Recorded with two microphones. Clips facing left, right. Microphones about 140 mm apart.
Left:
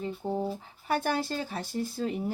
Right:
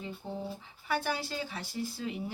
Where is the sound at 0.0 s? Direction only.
45° left (ahead or behind).